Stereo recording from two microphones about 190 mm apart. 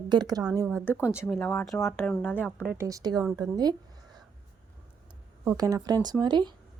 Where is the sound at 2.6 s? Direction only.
15° right (ahead or behind).